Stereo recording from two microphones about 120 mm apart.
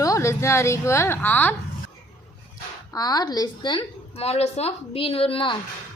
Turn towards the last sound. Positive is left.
turn(degrees=50)  # may be behind; listen again after turning